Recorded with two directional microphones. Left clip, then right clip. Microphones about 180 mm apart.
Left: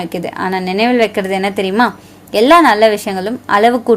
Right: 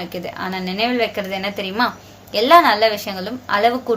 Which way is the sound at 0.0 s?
50° left (ahead or behind).